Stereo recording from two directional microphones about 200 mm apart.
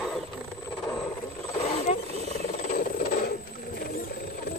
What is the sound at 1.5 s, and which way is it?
Wild animals, 35° left (ahead or behind).